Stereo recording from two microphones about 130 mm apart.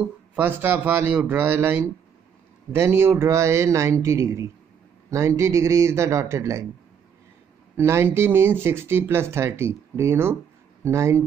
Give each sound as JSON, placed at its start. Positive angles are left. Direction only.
{"t": 0.4, "sound": "a man's voice", "side_deg": -15}
{"t": 7.7, "sound": "speech", "side_deg": -20}